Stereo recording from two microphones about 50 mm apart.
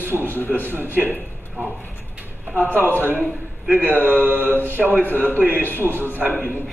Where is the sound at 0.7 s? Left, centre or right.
Right.